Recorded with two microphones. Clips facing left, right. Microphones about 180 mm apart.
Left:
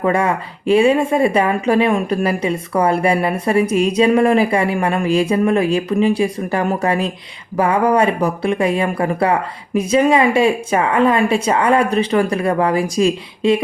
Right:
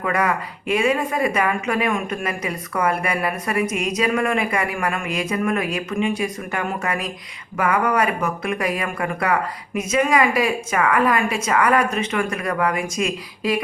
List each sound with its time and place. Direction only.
0.0 s speech: 30° left (ahead or behind)